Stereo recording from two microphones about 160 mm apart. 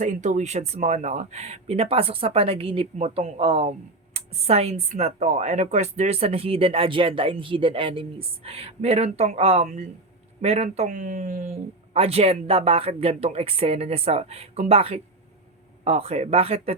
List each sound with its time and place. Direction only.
0.0 s speech: 50° right (ahead or behind)
11.9 s speech: 40° right (ahead or behind)